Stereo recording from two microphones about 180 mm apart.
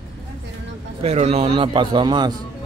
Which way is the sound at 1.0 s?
35° right (ahead or behind).